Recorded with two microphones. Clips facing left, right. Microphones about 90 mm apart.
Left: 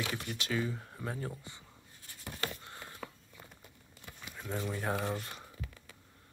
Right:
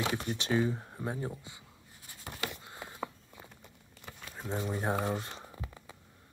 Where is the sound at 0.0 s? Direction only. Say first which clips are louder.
Right 5 dB; 30° right (ahead or behind).